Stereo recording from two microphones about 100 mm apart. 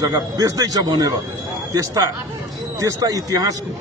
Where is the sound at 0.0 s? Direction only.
40° right (ahead or behind).